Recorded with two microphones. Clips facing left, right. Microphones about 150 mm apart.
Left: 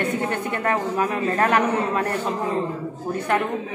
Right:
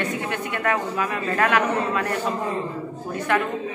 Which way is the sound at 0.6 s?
35° left (ahead or behind).